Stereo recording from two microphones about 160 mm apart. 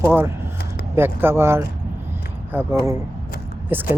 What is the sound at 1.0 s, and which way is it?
Speech, 15° right (ahead or behind).